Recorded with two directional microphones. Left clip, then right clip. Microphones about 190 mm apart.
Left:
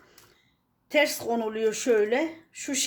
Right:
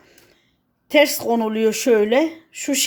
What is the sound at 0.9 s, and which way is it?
A woman's voice, 45° right (ahead or behind).